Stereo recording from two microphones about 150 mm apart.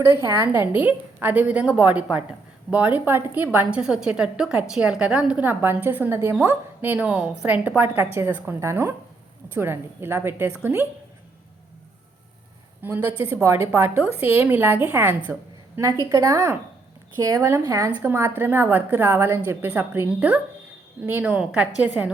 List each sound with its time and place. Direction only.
0.0 s a woman's voice: 15° right (ahead or behind)
12.8 s a woman's voice: 15° right (ahead or behind)